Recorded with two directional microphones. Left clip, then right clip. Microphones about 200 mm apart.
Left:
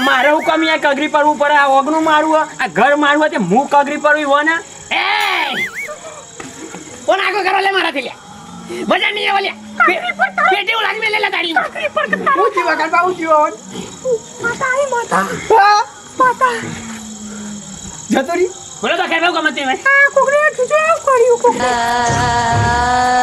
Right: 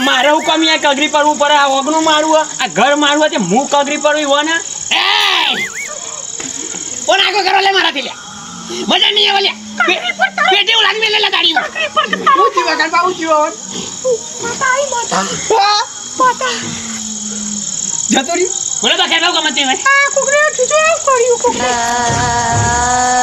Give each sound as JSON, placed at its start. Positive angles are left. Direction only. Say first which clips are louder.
{"t": 0.1, "sound": "a sound", "louder": "right 1 dB", "side_deg": -15}
{"t": 0.3, "sound": "speech", "louder": "right 2 dB", "side_deg": -10}
{"t": 4.9, "sound": "a sound", "louder": "right 3 dB", "side_deg": 20}
{"t": 7.1, "sound": "speech", "louder": "right 3 dB", "side_deg": 20}
{"t": 10.0, "sound": "speech", "louder": "right 1 dB", "side_deg": 0}
{"t": 10.5, "sound": "speech", "louder": "right 4 dB", "side_deg": 25}
{"t": 15.1, "sound": "speech", "louder": "left 1 dB", "side_deg": 15}
{"t": 15.4, "sound": "speech", "louder": "left 2 dB", "side_deg": 0}
{"t": 16.2, "sound": "speech", "louder": "even", "side_deg": 15}
{"t": 18.1, "sound": "speech", "louder": "even", "side_deg": 5}
{"t": 18.8, "sound": "speech", "louder": "right 3 dB", "side_deg": 20}
{"t": 20.7, "sound": "speech", "louder": "right 1 dB", "side_deg": 5}